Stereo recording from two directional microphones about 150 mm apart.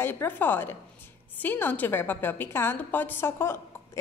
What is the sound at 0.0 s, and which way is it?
A woman's voice, 15° left (ahead or behind).